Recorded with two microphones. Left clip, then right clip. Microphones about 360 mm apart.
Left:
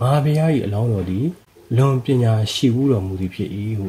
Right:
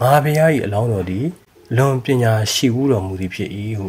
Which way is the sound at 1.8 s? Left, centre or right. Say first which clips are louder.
Right 3 dB; right.